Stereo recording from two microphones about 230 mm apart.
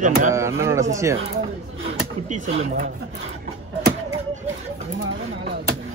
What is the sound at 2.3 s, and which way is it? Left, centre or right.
Speech, right.